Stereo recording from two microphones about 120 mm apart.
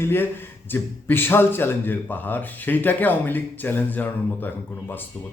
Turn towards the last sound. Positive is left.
turn(degrees=15)  # may be behind; listen again after turning